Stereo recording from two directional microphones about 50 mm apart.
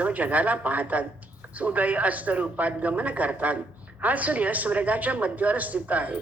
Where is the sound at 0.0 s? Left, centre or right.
Right.